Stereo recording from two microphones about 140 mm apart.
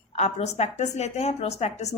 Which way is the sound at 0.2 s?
50° left (ahead or behind).